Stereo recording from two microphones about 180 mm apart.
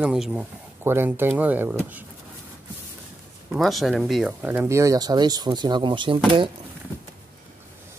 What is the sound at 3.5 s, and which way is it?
Speech, centre (ahead or behind).